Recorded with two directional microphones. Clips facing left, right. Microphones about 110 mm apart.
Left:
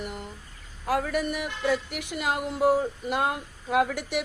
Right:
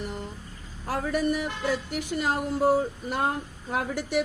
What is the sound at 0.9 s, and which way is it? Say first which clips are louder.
Speech: even; 35° right (ahead or behind).